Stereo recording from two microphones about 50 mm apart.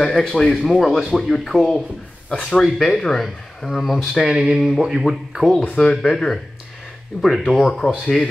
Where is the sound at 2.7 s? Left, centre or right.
Centre.